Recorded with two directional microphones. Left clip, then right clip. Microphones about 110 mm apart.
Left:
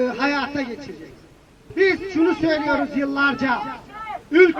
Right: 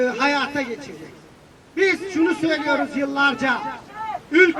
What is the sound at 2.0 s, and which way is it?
Speech, 15° left (ahead or behind).